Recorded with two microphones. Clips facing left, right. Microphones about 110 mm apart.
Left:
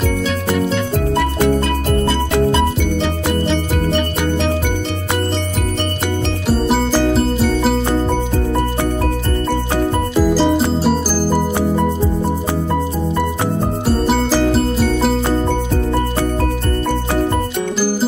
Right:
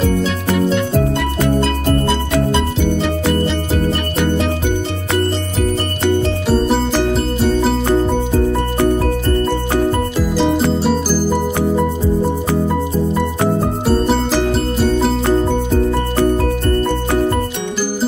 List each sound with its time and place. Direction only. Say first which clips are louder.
6.4 s music: left 3 dB; 5° left (ahead or behind)
10.1 s music: left 2 dB; 5° left (ahead or behind)